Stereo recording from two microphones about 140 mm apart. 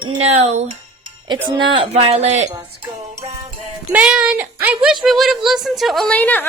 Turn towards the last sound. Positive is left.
turn(degrees=10)  # may be behind; listen again after turning